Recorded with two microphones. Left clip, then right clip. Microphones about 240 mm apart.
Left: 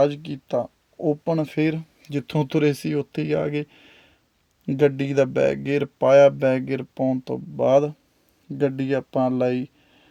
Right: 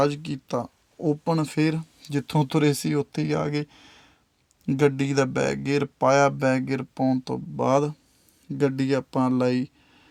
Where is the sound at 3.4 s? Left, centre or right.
Right.